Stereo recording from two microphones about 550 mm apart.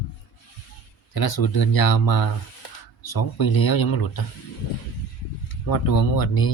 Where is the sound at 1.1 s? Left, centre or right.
Left.